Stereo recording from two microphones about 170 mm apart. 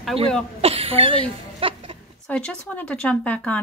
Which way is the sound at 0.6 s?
35° right (ahead or behind).